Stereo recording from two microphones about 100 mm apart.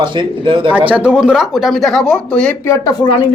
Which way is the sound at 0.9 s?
10° right (ahead or behind).